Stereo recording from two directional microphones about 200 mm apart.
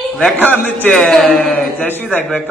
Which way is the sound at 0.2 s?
10° left (ahead or behind).